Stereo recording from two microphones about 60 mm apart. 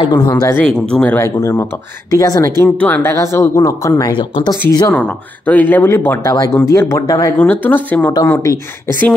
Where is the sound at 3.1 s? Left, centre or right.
Left.